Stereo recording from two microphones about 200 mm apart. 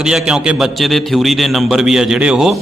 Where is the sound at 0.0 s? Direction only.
5° right (ahead or behind).